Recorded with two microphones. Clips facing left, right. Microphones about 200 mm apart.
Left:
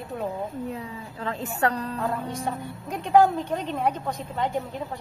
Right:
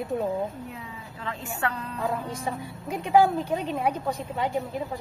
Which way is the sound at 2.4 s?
5° right (ahead or behind).